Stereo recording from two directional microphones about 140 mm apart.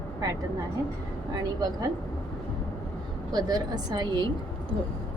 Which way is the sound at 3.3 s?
30° right (ahead or behind).